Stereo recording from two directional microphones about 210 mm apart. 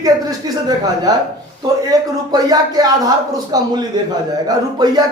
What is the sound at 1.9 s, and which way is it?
A man's voice, 20° right (ahead or behind).